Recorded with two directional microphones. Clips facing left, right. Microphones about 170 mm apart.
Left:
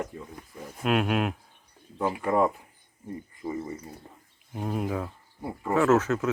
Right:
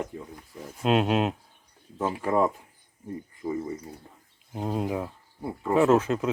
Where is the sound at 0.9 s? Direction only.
25° right (ahead or behind).